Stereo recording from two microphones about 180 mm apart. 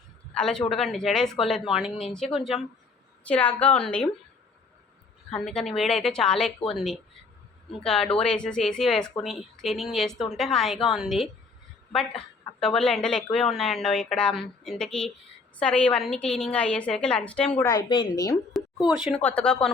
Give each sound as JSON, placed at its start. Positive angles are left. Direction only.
{"t": 0.3, "sound": "a woman's voice", "side_deg": 5}
{"t": 5.3, "sound": "speech", "side_deg": 5}
{"t": 7.9, "sound": "speech", "side_deg": 5}
{"t": 17.7, "sound": "speech", "side_deg": 25}
{"t": 18.5, "sound": "a sound", "side_deg": 0}
{"t": 18.9, "sound": "speech", "side_deg": 0}